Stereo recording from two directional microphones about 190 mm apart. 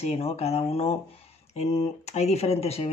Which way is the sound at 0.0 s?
35° left (ahead or behind).